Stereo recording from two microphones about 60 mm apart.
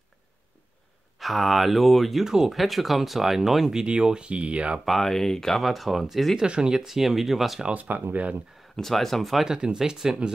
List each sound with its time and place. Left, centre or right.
1.2 s speech: centre
4.8 s speech: centre
6.4 s speech: centre
7.6 s speech: right
8.7 s speech: centre
9.5 s speech: centre